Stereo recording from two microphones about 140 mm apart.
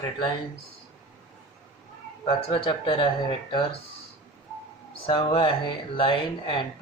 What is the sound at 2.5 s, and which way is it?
Speech, 40° left (ahead or behind).